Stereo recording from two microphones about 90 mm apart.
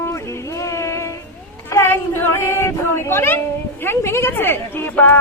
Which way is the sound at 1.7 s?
25° left (ahead or behind).